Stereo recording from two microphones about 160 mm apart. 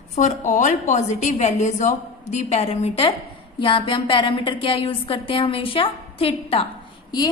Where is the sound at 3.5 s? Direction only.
30° left (ahead or behind).